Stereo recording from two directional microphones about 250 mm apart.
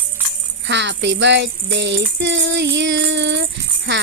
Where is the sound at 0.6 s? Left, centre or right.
Right.